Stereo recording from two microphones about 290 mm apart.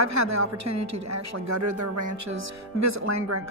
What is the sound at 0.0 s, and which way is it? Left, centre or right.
A woman's voice, right.